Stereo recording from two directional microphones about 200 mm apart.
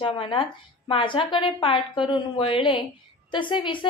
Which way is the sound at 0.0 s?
25° left (ahead or behind).